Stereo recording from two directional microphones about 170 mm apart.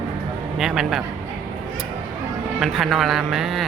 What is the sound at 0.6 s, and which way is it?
Speech, centre (ahead or behind).